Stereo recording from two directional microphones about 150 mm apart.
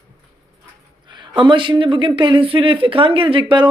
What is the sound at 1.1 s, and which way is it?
Speech, 30° right (ahead or behind).